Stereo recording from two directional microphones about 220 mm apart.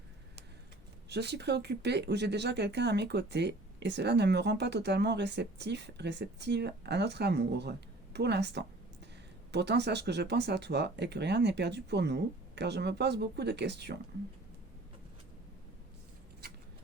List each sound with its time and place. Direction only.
1.1 s speech: 50° right (ahead or behind)